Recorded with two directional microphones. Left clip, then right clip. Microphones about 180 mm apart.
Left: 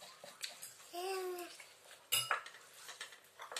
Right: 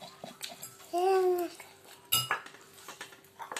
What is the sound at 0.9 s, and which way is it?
Babbling, 20° left (ahead or behind).